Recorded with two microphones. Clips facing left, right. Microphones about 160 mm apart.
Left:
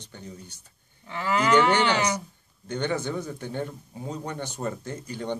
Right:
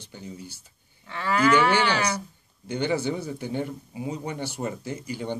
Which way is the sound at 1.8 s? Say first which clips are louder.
Left 1 dB; 15° left (ahead or behind).